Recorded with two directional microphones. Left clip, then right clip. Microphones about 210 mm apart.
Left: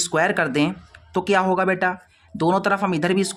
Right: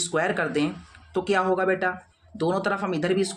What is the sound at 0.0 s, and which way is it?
Speech, 40° left (ahead or behind).